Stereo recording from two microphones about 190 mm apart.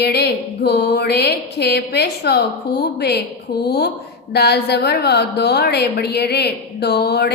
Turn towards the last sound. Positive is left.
turn(degrees=60)  # may be behind; listen again after turning